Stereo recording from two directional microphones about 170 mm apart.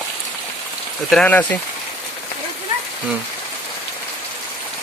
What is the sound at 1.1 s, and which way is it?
Speech, 5° left (ahead or behind).